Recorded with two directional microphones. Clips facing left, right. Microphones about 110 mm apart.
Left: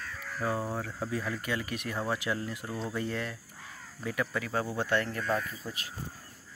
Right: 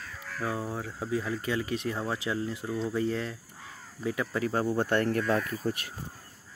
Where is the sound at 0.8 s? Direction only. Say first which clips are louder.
Right 2 dB; 20° right (ahead or behind).